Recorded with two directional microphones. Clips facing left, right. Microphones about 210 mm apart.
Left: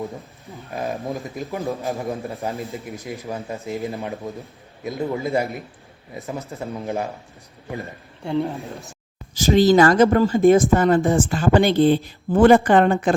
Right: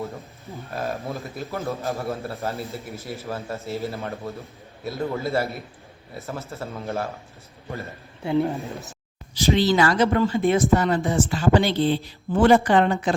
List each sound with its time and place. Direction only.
0.7 s a man's voice: 15° left (ahead or behind)
8.2 s speech: 5° right (ahead or behind)
9.3 s speech: 45° left (ahead or behind)